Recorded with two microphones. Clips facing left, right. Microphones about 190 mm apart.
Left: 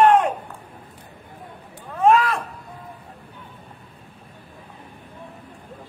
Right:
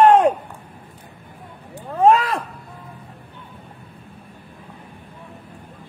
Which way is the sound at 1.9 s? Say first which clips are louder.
Right 2 dB; 30° right (ahead or behind).